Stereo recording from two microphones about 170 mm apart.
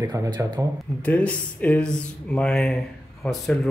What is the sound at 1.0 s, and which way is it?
Speech, 10° left (ahead or behind).